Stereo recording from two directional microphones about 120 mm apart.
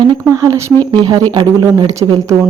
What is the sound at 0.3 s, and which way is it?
Speech, 25° right (ahead or behind).